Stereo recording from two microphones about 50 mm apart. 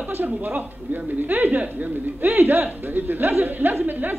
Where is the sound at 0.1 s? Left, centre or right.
Right.